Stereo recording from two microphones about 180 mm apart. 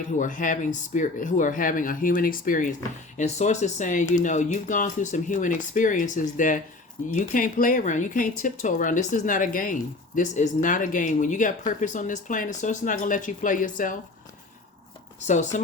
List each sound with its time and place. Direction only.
0.2 s speech: 45° left (ahead or behind)
15.2 s speech: 40° left (ahead or behind)